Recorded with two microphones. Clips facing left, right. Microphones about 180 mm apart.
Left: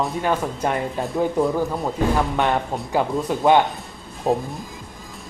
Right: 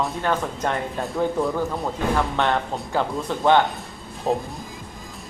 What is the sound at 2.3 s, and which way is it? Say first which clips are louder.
Speech: left 1 dB; 15° left (ahead or behind).